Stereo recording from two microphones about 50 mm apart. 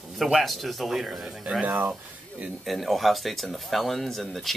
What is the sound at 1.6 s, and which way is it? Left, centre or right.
Speech, right.